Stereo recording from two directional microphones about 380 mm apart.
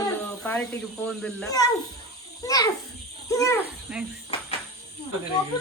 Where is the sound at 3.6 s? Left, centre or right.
Centre.